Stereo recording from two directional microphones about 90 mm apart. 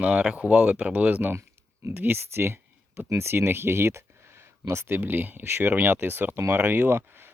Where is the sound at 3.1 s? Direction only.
30° right (ahead or behind).